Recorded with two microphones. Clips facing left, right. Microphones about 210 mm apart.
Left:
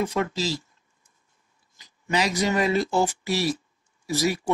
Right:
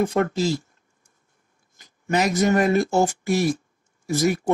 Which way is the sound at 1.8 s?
50° right (ahead or behind).